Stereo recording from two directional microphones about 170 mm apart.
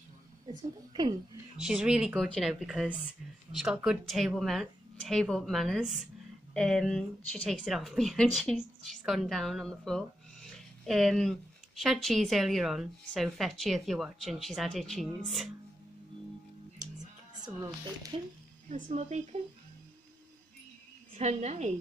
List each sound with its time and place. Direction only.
1.6 s speech: 5° right (ahead or behind)
18.1 s a woman's voice: 35° right (ahead or behind)
21.2 s a woman's voice: 40° right (ahead or behind)